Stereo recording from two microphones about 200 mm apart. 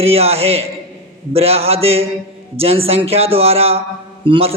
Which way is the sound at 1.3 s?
30° right (ahead or behind).